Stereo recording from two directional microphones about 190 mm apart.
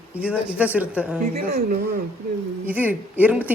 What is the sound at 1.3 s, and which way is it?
Speech, 55° right (ahead or behind).